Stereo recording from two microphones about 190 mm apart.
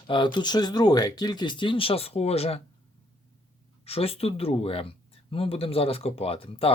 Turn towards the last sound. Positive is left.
turn(degrees=30)  # may be behind; listen again after turning